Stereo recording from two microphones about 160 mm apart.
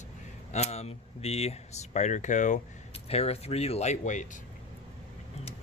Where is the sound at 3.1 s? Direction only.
40° left (ahead or behind).